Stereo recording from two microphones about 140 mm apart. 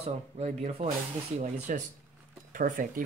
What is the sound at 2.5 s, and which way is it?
Speech, 85° right.